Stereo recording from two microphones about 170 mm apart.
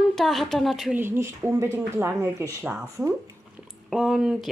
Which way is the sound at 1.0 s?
15° right (ahead or behind).